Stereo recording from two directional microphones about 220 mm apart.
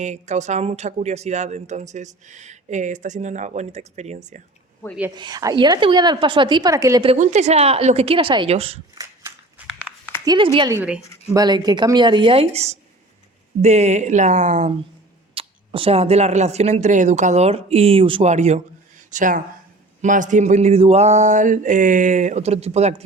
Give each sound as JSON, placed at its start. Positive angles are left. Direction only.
{"t": 0.0, "sound": "speech", "side_deg": -30}
{"t": 5.1, "sound": "a woman's voice", "side_deg": -20}
{"t": 9.6, "sound": "a sound", "side_deg": -5}
{"t": 10.2, "sound": "a woman's voice", "side_deg": -20}
{"t": 10.8, "sound": "a woman's voice", "side_deg": -5}
{"t": 11.3, "sound": "a woman's voice", "side_deg": -20}